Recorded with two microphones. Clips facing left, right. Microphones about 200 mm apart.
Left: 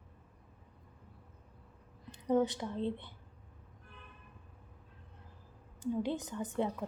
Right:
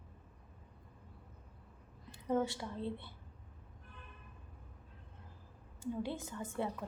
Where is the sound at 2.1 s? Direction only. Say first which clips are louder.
Left 4 dB; 20° left (ahead or behind).